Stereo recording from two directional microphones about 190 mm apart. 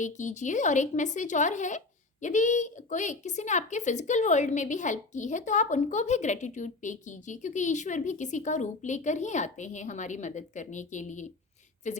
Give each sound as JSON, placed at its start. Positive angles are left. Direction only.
{"t": 0.0, "sound": "a woman's voice", "side_deg": 40}